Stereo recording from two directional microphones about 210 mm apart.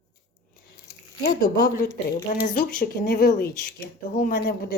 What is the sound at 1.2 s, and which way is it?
Speech, 40° left (ahead or behind).